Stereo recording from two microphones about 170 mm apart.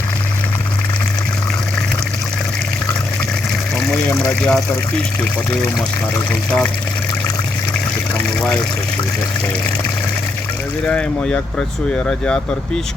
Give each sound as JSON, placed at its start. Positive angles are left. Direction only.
{"t": 4.3, "sound": "speech", "side_deg": 5}
{"t": 8.4, "sound": "speech", "side_deg": 5}
{"t": 10.8, "sound": "speech", "side_deg": 5}